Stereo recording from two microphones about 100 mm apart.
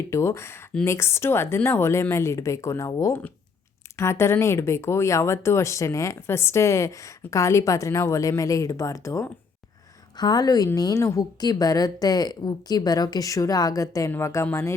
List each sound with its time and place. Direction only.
0.1 s a woman's voice: 25° left (ahead or behind)
10.2 s a woman's voice: 45° left (ahead or behind); by 14.4 s 25° left (ahead or behind)